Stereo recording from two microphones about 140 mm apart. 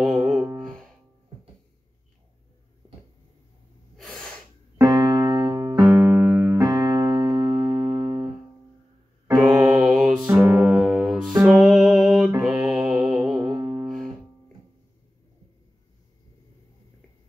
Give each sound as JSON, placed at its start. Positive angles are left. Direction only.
{"t": 0.6, "sound": "music", "side_deg": 5}
{"t": 3.9, "sound": "sneeze", "side_deg": 5}
{"t": 4.7, "sound": "music", "side_deg": -25}
{"t": 5.9, "sound": "electric piano", "side_deg": -15}
{"t": 6.6, "sound": "music", "side_deg": -25}
{"t": 9.4, "sound": "music", "side_deg": -5}
{"t": 12.4, "sound": "mantra", "side_deg": 0}
{"t": 13.1, "sound": "music", "side_deg": -20}